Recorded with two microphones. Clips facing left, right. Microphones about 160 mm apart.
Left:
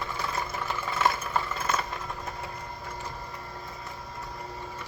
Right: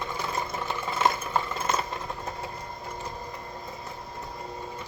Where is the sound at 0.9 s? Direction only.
20° right (ahead or behind).